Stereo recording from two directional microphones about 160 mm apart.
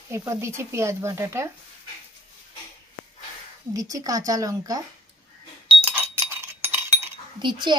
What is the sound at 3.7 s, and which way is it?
A woman's voice, 20° right (ahead or behind).